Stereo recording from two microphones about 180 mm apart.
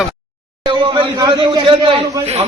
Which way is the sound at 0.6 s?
25° right (ahead or behind).